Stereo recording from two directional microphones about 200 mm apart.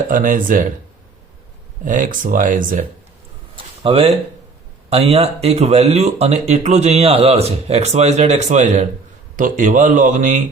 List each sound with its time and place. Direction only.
0.1 s speech: 40° right (ahead or behind)
1.8 s speech: 40° right (ahead or behind)
3.5 s a sound: 25° right (ahead or behind)
4.9 s speech: 30° right (ahead or behind)